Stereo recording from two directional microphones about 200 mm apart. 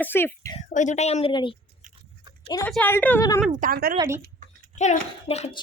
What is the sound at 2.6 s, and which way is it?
Speech, 10° left (ahead or behind).